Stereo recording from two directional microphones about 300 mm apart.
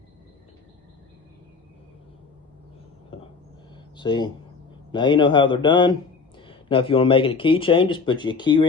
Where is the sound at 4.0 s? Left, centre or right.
Centre.